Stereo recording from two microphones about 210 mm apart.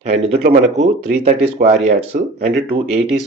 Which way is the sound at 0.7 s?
35° right (ahead or behind).